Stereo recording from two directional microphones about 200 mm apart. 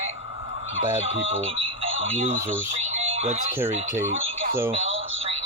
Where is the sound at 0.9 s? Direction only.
35° right (ahead or behind).